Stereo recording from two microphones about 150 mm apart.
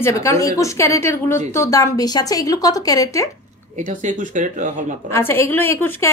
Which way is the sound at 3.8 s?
55° right (ahead or behind).